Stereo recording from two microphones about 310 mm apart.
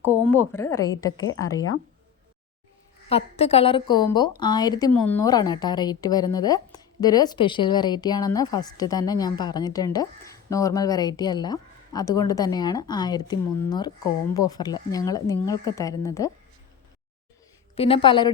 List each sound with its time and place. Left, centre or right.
0.3 s a woman's voice: centre
3.1 s a woman's voice: centre
17.7 s a woman's voice: centre